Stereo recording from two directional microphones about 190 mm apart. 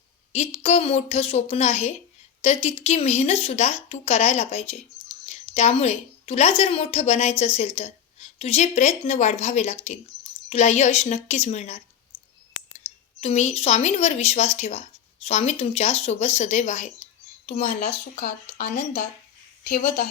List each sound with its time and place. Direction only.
0.3 s a woman's voice: 35° left (ahead or behind)
13.2 s a woman's voice: 35° left (ahead or behind); by 20.1 s 55° left (ahead or behind)